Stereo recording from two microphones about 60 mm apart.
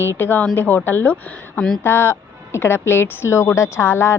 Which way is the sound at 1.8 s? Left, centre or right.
Left.